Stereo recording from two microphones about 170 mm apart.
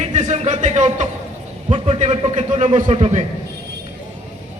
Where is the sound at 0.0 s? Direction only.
45° right (ahead or behind).